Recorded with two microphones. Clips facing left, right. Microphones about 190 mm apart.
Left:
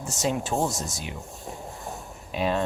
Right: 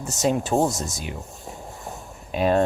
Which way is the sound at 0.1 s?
40° right (ahead or behind).